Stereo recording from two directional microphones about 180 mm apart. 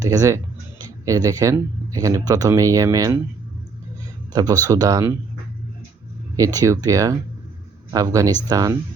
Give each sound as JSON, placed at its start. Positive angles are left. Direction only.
{"t": 0.0, "sound": "speech", "side_deg": -20}
{"t": 4.3, "sound": "speech", "side_deg": -20}
{"t": 6.3, "sound": "speech", "side_deg": -20}